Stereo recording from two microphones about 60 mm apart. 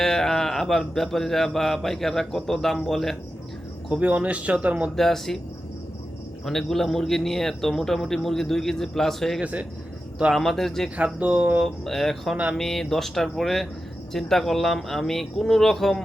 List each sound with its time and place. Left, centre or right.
0.0 s speech: centre
3.9 s a man's voice: right
4.9 s speech: centre
6.4 s speech: centre
9.4 s a man's voice: right
10.3 s speech: centre
10.9 s a man's voice: right
11.6 s speech: centre